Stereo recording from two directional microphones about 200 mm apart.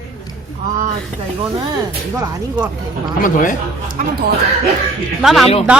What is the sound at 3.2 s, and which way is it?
Speech, 40° left (ahead or behind).